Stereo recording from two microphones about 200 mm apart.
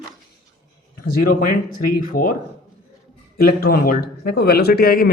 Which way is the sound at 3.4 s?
50° left (ahead or behind).